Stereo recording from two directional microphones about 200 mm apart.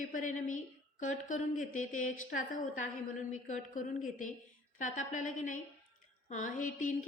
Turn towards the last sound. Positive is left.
turn(degrees=40)  # may be behind; listen again after turning